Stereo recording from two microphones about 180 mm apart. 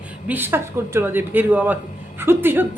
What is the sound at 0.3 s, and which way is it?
A woman's voice, 10° right (ahead or behind).